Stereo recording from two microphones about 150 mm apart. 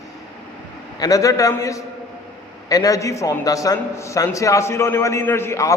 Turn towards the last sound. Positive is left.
turn(degrees=20)  # may be behind; listen again after turning